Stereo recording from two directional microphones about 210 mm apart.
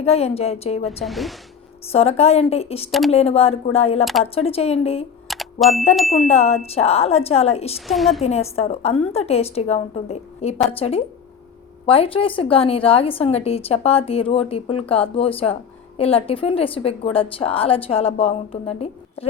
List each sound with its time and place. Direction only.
0.0 s a woman's voice: 30° left (ahead or behind)
1.0 s a woman's voice: centre (ahead or behind)
1.9 s a woman's voice: 30° left (ahead or behind)
5.3 s ding: centre (ahead or behind)
6.0 s a woman's voice: centre (ahead or behind)
6.2 s a woman's voice: 30° left (ahead or behind)
7.9 s a woman's voice: centre (ahead or behind)
8.2 s a woman's voice: 30° left (ahead or behind)